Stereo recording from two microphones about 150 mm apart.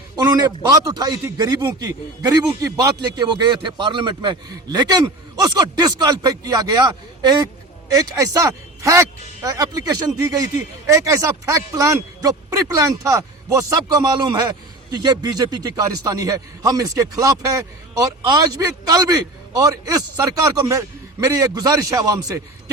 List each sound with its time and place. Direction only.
0.2 s speech: 25° right (ahead or behind)